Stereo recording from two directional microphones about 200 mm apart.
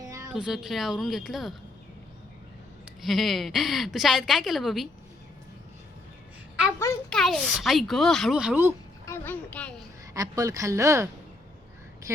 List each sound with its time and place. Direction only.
0.0 s a sound: 15° right (ahead or behind)
0.3 s a woman's voice: 5° right (ahead or behind)
3.0 s a woman's voice: centre (ahead or behind)
7.1 s a woman's voice: centre (ahead or behind)
9.0 s speech: 10° left (ahead or behind)
10.2 s a woman's voice: 15° right (ahead or behind)